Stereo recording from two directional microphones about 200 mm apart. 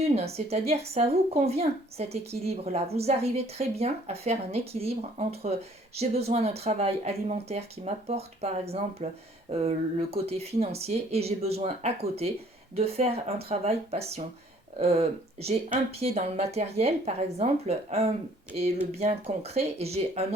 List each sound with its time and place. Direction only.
0.2 s a woman's voice: 30° right (ahead or behind)